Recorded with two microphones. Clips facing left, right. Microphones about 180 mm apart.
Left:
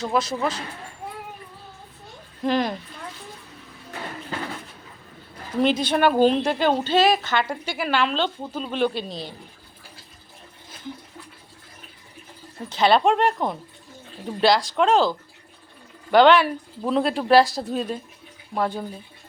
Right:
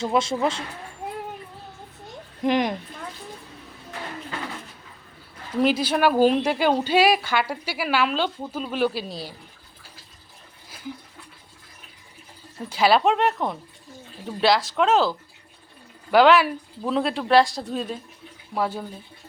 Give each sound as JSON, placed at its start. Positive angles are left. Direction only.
{"t": 0.0, "sound": "speech", "side_deg": -25}
{"t": 2.4, "sound": "a woman's voice", "side_deg": -15}
{"t": 5.5, "sound": "a woman's voice", "side_deg": -5}
{"t": 12.6, "sound": "speech", "side_deg": -10}
{"t": 16.1, "sound": "speech", "side_deg": -5}